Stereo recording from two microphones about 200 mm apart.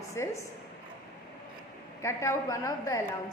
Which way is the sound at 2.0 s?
15° left (ahead or behind).